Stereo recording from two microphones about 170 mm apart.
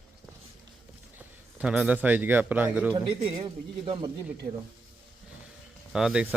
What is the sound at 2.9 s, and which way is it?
Speech, 30° right (ahead or behind).